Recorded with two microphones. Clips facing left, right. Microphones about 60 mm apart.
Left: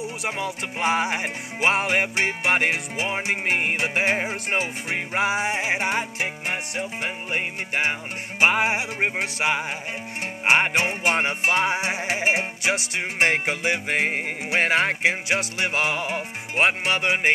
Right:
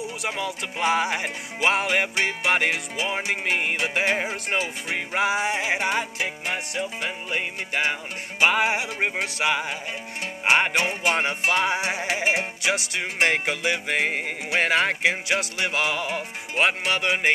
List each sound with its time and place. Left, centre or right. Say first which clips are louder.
0.2 s music: even; left